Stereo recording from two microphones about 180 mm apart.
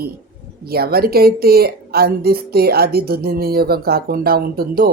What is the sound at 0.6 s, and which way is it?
A woman's voice, 60° right (ahead or behind).